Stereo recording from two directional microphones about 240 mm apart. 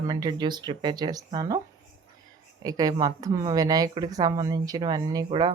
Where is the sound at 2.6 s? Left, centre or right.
Centre.